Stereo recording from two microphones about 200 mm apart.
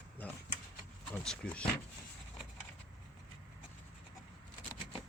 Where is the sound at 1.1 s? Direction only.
5° left (ahead or behind).